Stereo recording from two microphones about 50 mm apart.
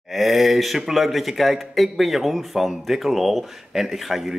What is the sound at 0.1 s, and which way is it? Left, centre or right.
Speech, centre.